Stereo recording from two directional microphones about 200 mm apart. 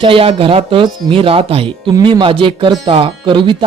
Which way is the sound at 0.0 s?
25° right (ahead or behind).